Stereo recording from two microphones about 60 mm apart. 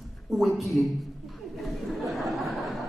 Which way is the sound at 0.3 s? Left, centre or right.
Centre.